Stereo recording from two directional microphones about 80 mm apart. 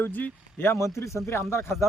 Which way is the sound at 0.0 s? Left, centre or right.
Left.